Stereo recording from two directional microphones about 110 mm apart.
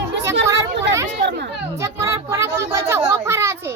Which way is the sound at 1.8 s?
30° right (ahead or behind).